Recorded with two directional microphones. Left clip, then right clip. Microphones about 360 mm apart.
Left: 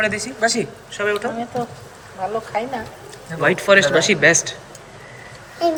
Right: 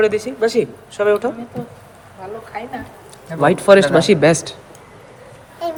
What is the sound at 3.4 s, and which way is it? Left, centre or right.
Speech, centre.